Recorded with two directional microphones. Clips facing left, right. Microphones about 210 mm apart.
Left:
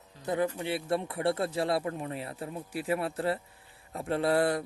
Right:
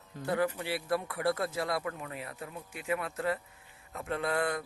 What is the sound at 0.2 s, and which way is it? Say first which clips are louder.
A man's voice: left 1 dB; 20° left (ahead or behind).